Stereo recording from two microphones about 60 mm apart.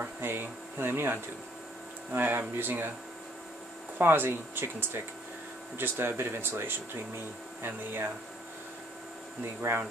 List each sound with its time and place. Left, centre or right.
0.0 s speech: right
4.0 s speech: right
9.4 s speech: right